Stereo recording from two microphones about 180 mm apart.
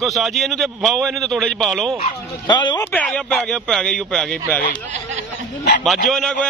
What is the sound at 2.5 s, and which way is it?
Speech, 25° left (ahead or behind).